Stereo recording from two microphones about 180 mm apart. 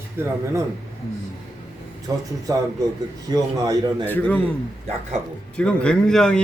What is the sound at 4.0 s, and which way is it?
Speech, 10° left (ahead or behind).